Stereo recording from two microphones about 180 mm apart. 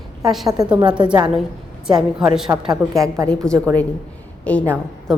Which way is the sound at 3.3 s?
5° left (ahead or behind).